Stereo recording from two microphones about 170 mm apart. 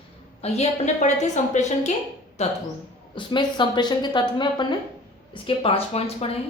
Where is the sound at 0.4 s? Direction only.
40° left (ahead or behind).